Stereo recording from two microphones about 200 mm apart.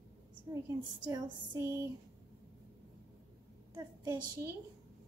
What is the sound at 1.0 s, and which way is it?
Speech, 20° right (ahead or behind).